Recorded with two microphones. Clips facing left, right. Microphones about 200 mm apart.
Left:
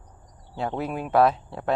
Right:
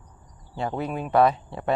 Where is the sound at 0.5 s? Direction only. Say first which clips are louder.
Even; centre (ahead or behind).